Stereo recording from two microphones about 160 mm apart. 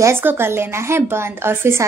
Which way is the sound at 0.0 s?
15° right (ahead or behind).